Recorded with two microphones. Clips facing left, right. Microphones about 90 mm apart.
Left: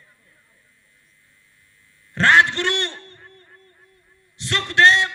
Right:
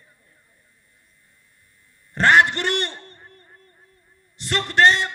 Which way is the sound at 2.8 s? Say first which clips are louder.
Left 1 dB; 10° right (ahead or behind).